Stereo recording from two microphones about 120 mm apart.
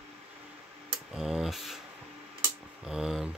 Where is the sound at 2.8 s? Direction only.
5° right (ahead or behind).